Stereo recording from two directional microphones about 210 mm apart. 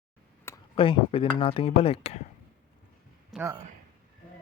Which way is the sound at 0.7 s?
25° left (ahead or behind).